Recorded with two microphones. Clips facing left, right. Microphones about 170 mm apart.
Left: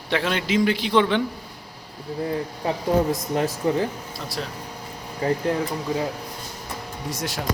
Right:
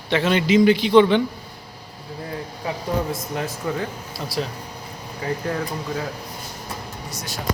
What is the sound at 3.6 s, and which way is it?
Speech, 25° left (ahead or behind).